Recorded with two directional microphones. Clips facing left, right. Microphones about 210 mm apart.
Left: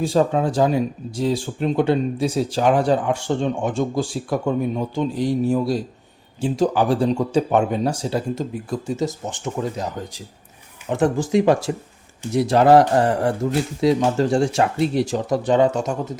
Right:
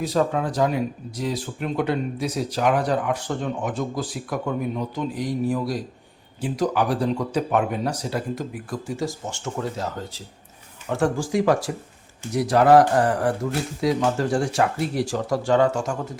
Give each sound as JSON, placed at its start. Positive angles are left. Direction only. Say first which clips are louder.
{"t": 0.0, "sound": "speech", "louder": "left 4 dB", "side_deg": 30}